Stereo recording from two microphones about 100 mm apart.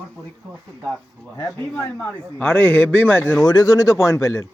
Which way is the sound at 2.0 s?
10° left (ahead or behind).